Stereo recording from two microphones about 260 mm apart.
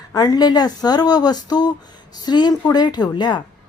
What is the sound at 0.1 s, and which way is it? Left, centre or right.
Speech, centre.